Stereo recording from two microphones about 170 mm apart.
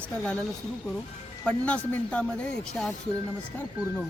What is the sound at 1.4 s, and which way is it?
Speech, 5° left (ahead or behind).